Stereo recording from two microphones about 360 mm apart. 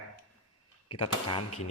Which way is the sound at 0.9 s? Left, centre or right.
Centre.